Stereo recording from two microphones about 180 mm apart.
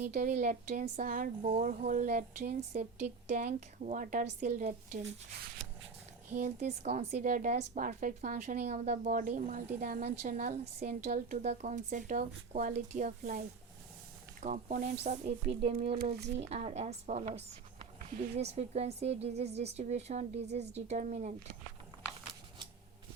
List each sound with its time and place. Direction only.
0.0 s a woman's voice: 45° right (ahead or behind)
2.5 s a woman's voice: 40° right (ahead or behind)
6.3 s a woman's voice: 40° right (ahead or behind)
14.4 s a woman's voice: 45° right (ahead or behind)
14.9 s a woman's voice: 35° right (ahead or behind)